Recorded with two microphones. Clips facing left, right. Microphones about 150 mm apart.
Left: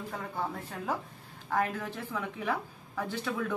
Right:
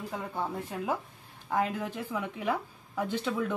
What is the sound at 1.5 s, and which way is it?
Speech, 15° right (ahead or behind).